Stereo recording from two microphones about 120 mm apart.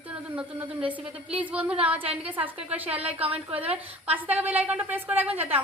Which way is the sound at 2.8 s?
55° right (ahead or behind).